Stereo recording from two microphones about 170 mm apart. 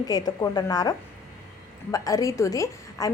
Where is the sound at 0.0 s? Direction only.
25° left (ahead or behind).